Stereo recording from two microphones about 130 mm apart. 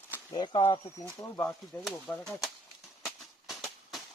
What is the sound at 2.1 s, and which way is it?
Speech, 5° left (ahead or behind).